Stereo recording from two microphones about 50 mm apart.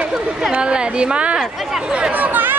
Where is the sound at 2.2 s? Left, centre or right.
Right.